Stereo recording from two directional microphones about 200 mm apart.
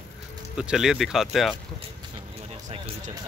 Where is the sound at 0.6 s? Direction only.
5° right (ahead or behind).